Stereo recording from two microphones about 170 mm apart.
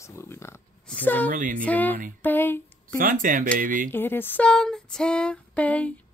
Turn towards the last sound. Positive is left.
turn(degrees=10)  # may be behind; listen again after turning